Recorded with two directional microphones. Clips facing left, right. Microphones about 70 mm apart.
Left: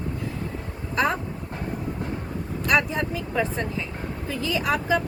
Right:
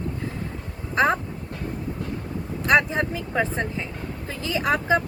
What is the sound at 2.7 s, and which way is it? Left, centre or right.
Speech, right.